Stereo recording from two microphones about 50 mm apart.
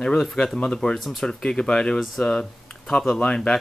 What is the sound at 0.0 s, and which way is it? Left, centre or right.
Speech, centre.